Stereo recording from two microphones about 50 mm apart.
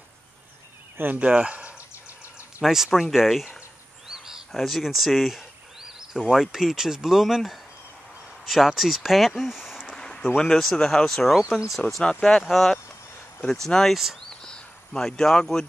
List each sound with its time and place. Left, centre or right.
0.9 s speech: right
1.3 s speech: right
2.6 s speech: centre
4.1 s cricket: centre
4.5 s a sound: centre
6.3 s speech: centre
9.9 s a sound: centre
10.3 s speech: centre
12.4 s speech: centre
14.4 s a sound: centre